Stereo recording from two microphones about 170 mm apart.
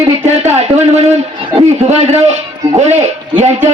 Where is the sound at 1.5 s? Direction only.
40° right (ahead or behind).